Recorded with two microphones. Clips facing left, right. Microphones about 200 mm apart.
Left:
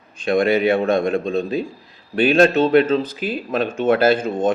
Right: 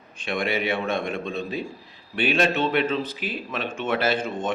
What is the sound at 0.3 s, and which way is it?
Speech, 35° left (ahead or behind).